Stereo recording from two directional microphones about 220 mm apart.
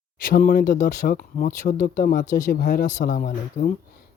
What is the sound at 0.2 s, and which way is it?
Speech, 40° left (ahead or behind).